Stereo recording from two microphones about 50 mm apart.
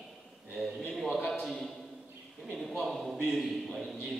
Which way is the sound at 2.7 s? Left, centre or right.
Centre.